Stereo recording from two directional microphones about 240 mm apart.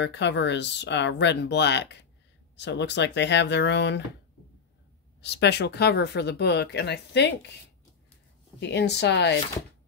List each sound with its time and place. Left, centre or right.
0.0 s speech: left
5.2 s speech: left
8.5 s speech: left